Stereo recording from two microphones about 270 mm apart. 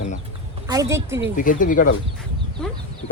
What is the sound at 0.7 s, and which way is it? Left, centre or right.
Speech, centre.